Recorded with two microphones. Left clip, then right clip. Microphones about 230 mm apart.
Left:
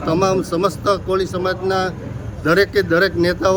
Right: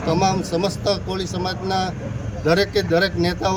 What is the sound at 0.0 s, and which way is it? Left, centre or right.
Speech, centre.